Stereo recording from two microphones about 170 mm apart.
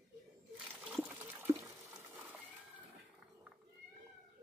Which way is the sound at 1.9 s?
15° right (ahead or behind).